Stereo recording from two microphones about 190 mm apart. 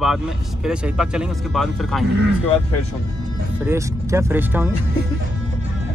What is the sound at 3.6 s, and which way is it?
Speech, 15° right (ahead or behind).